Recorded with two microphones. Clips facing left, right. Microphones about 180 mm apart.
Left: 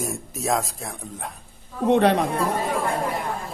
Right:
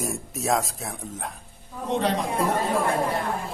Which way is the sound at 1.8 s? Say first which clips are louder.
Left 7 dB; 65° left (ahead or behind).